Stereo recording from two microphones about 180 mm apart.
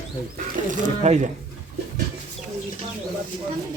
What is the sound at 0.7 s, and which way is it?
Speech, 40° right (ahead or behind).